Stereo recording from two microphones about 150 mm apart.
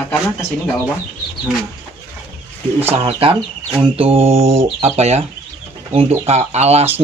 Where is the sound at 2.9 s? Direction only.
40° right (ahead or behind).